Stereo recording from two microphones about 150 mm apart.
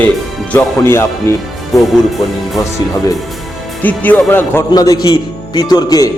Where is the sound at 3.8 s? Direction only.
10° left (ahead or behind).